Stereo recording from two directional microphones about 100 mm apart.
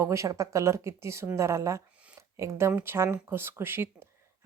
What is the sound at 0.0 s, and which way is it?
Speech, 30° right (ahead or behind).